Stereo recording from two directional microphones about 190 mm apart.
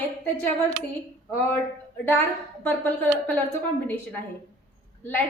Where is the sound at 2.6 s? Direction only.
10° left (ahead or behind).